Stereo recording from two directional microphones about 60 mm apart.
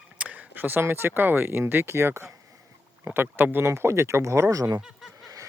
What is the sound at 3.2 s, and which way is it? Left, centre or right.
Speech, right.